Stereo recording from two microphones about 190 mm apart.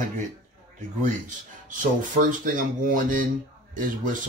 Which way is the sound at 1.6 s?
45° right (ahead or behind).